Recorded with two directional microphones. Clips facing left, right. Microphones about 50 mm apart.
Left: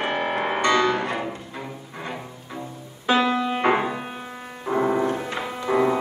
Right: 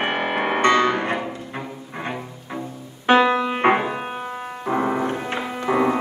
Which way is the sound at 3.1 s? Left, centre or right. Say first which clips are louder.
Right 4 dB; right.